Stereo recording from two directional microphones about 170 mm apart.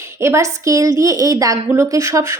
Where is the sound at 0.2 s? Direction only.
15° right (ahead or behind).